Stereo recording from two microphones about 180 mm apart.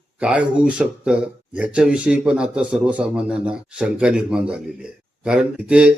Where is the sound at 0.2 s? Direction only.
5° right (ahead or behind).